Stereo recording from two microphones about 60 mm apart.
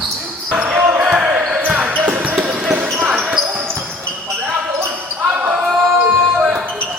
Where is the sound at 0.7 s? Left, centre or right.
Right.